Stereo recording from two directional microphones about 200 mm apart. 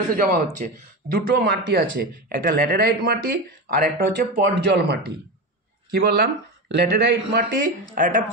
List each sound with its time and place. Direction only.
0.1 s speech: 45° right (ahead or behind)
5.9 s a woman's voice: 50° right (ahead or behind)